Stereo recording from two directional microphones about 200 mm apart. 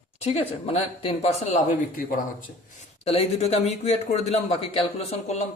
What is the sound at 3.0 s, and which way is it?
Speech, 30° left (ahead or behind).